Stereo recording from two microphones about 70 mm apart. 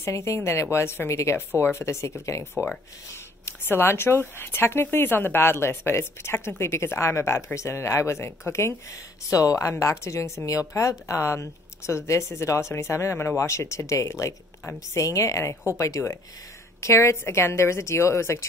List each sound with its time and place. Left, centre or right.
0.0 s speech: left